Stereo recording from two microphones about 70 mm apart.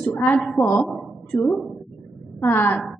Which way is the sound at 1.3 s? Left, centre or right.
Left.